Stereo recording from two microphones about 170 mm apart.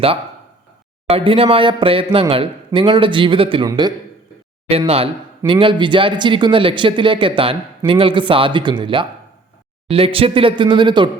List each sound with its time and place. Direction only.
1.0 s speech: 35° right (ahead or behind)
5.5 s speech: 30° right (ahead or behind)